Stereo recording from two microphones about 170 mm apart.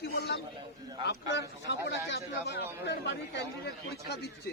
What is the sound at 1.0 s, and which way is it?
A man's voice, 85° left.